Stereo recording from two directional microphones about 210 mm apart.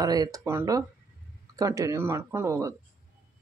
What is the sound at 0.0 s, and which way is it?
Speech, 20° right (ahead or behind).